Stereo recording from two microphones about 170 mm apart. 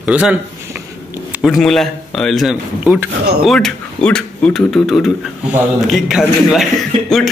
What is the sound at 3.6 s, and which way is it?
A man's voice, 5° left (ahead or behind).